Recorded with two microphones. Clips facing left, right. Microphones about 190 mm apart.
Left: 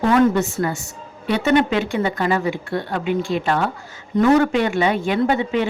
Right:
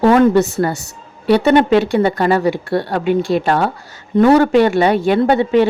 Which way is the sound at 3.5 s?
35° right (ahead or behind).